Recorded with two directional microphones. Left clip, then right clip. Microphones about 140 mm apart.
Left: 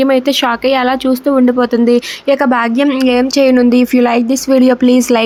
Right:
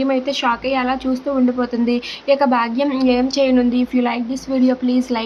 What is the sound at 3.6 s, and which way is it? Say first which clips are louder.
Speech: left 8 dB; 50° left (ahead or behind).